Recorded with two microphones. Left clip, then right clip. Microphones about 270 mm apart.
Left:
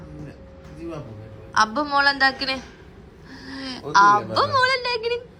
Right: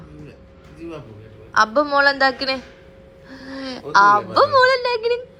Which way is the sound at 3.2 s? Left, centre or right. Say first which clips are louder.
Right 2 dB; centre.